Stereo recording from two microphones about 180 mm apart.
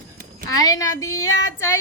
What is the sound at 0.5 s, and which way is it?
Speech, 20° left (ahead or behind).